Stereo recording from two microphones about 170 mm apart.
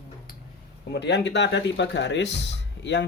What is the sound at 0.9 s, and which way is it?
Speech, 90° left.